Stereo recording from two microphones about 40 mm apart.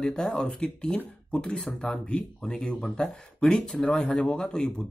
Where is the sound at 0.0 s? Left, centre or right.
Left.